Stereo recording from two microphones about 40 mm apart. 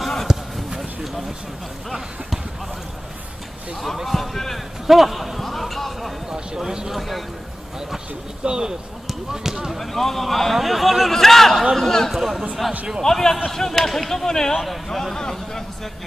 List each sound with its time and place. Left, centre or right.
0.0 s basketball bounce: centre
0.3 s clip-clop: centre
3.8 s speech: centre
4.8 s a sound: centre
6.3 s speech: centre
6.9 s a man's voice: centre
8.5 s speech: centre
9.8 s a man's voice: centre
12.1 s a man's voice: centre
13.0 s speech: centre